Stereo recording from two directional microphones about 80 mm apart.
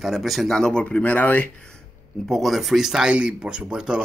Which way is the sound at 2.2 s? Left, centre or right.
Centre.